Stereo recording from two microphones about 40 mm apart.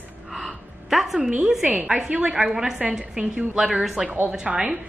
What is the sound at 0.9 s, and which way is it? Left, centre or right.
Speech, centre.